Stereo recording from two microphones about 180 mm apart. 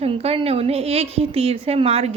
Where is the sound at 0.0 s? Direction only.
35° right (ahead or behind).